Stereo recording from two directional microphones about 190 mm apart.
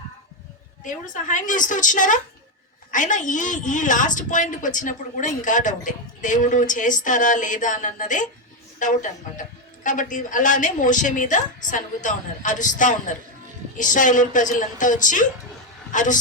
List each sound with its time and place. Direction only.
1.1 s a woman's voice: 40° left (ahead or behind)